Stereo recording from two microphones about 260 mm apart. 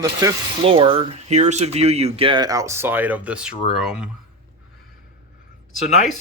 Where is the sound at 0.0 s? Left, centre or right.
Centre.